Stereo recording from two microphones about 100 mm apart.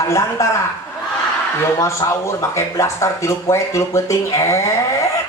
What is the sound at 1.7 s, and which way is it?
Speech, 30° left (ahead or behind).